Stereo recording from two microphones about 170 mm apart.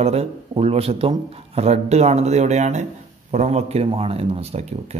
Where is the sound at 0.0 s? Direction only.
40° right (ahead or behind).